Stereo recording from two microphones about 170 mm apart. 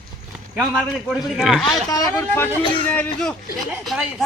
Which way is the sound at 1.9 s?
20° left (ahead or behind).